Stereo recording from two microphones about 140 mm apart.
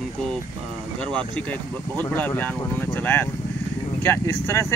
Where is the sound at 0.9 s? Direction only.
5° left (ahead or behind).